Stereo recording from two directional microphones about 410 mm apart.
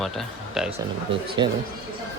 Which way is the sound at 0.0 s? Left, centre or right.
Centre.